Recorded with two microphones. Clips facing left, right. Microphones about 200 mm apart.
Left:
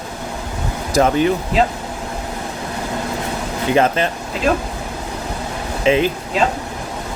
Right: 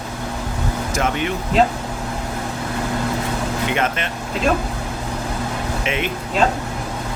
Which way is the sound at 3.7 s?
35° left (ahead or behind).